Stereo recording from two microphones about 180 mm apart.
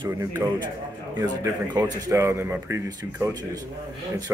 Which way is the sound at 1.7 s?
20° right (ahead or behind).